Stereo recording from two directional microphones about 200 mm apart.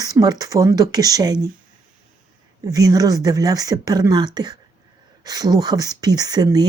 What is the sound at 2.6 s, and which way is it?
Speech, 15° right (ahead or behind).